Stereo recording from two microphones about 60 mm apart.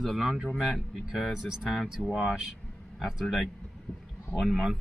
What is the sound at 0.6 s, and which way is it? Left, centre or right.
Speech, centre.